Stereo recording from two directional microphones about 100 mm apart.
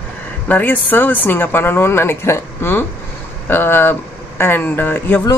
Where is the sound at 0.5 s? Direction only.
20° left (ahead or behind).